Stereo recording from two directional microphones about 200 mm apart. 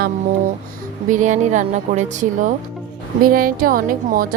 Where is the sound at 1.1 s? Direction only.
40° right (ahead or behind).